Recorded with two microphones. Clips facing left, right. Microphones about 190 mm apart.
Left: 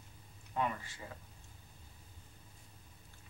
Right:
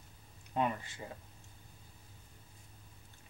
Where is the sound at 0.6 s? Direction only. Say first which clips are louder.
Right 3 dB; 25° right (ahead or behind).